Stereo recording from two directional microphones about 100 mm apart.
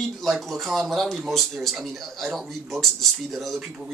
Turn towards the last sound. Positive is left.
turn(degrees=-5)  # may be behind; listen again after turning